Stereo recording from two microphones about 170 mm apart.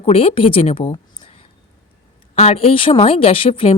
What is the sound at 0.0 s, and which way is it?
A woman's voice, 35° left (ahead or behind).